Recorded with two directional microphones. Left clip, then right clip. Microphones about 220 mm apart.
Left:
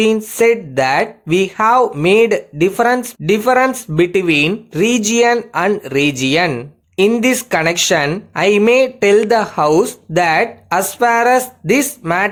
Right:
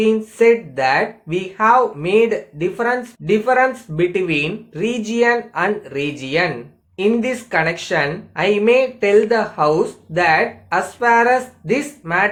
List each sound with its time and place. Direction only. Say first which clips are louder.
0.0 s speech: left 1 dB; 50° left (ahead or behind)